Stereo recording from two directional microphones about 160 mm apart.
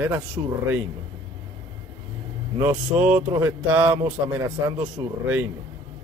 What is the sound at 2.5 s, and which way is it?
Speech, 20° right (ahead or behind).